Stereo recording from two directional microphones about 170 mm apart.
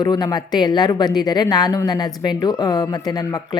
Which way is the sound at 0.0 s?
25° left (ahead or behind).